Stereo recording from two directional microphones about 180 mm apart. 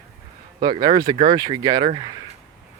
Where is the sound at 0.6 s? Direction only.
25° right (ahead or behind).